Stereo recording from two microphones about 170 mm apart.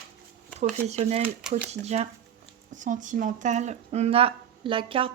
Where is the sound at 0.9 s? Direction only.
40° right (ahead or behind).